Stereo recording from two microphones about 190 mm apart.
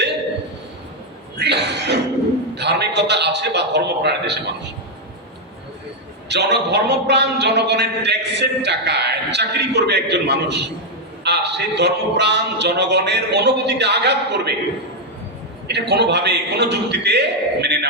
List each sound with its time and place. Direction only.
1.4 s a sound: 60° right (ahead or behind)
2.6 s a man's voice: 60° right (ahead or behind)
6.2 s a man's voice: 60° right (ahead or behind)
15.6 s a man's voice: 60° right (ahead or behind)